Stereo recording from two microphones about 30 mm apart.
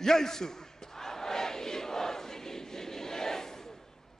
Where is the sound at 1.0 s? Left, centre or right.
Centre.